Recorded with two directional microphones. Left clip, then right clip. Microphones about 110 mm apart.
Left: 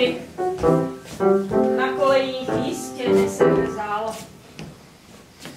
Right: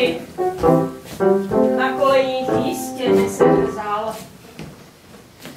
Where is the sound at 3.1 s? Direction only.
25° right (ahead or behind).